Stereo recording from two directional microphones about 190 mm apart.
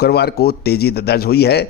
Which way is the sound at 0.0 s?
60° left (ahead or behind).